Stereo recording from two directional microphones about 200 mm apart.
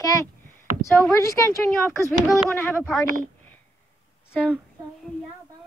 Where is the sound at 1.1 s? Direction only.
15° left (ahead or behind).